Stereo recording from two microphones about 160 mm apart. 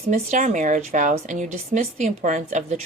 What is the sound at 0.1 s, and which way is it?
Speech, 50° right (ahead or behind).